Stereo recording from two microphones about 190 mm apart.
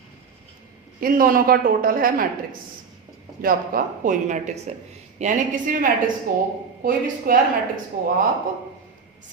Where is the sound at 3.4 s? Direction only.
50° right (ahead or behind).